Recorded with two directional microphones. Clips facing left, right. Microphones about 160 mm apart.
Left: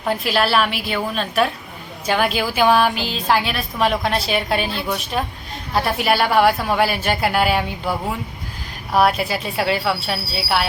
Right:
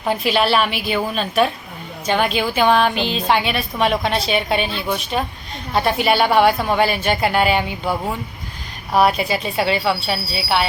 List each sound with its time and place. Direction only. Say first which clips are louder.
0.0 s a woman's voice: right 1 dB; centre (ahead or behind)